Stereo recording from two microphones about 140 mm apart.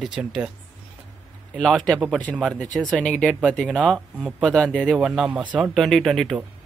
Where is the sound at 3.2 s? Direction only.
5° right (ahead or behind).